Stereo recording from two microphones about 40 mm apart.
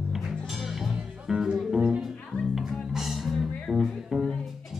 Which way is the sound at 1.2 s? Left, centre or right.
Centre.